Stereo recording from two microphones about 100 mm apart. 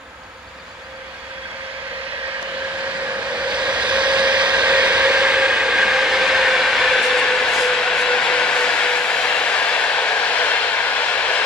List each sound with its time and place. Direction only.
3.3 s vehicle: 10° right (ahead or behind); by 11.4 s 10° left (ahead or behind)